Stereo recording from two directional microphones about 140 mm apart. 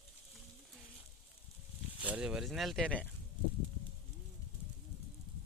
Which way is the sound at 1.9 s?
10° right (ahead or behind).